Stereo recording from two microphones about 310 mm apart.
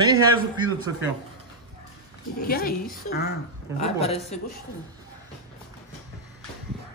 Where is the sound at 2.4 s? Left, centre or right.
Left.